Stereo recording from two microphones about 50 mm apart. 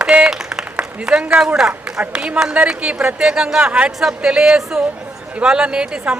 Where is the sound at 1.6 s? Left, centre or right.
Centre.